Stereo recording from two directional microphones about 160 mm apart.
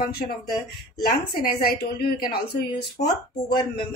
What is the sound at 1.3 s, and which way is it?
A woman's voice, 70° left (ahead or behind).